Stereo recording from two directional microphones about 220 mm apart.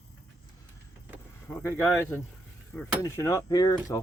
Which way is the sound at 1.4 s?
10° left (ahead or behind).